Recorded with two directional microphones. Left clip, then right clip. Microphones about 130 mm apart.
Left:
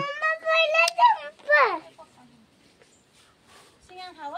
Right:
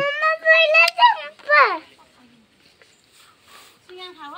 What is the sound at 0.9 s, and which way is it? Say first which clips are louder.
Children playing: right 4 dB; 25° right (ahead or behind).